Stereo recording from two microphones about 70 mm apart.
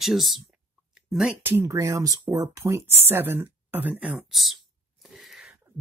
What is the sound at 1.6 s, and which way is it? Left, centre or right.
Speech, right.